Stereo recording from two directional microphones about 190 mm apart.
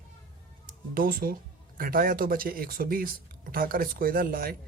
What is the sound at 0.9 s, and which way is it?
A man's voice, 50° right (ahead or behind).